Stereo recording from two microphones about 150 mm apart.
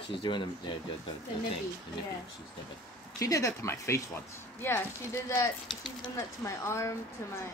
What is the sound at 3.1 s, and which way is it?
Speech, 20° left (ahead or behind).